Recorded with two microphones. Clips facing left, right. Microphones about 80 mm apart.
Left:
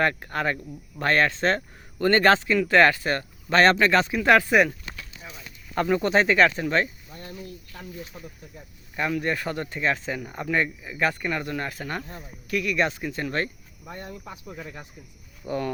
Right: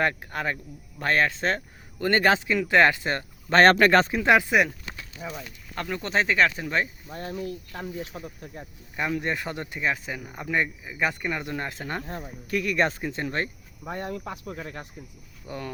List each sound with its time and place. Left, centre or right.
0.0 s speech: centre
3.5 s speech: right
4.2 s speech: centre
5.2 s speech: right
5.7 s speech: centre
8.1 s speech: right
12.2 s speech: right
13.9 s speech: right
15.4 s speech: centre